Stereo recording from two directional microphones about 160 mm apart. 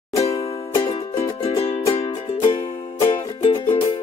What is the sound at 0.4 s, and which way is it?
Music, 35° left (ahead or behind).